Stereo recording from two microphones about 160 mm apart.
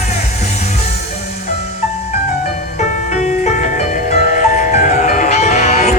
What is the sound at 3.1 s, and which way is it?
Music, 45° left (ahead or behind).